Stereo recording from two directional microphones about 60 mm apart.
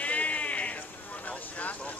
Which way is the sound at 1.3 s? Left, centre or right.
Left.